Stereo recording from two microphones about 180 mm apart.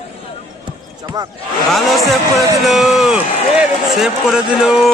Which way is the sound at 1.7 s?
Centre (ahead or behind).